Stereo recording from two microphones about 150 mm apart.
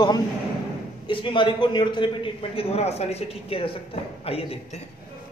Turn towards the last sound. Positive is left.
turn(degrees=40)  # may be behind; listen again after turning